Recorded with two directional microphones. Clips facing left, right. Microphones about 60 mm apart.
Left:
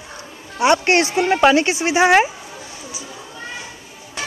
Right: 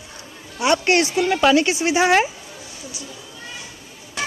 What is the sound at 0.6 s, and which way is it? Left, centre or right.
Speech, left.